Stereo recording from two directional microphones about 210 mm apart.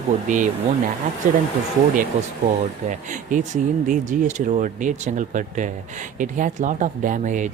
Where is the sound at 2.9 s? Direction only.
35° right (ahead or behind).